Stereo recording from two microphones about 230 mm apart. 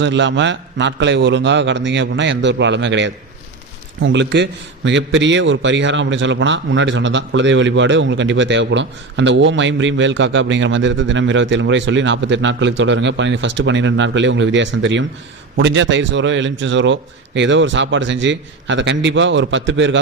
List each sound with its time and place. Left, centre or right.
0.0 s a man's voice: right